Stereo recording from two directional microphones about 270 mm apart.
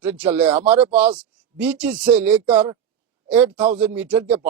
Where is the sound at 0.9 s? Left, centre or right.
Centre.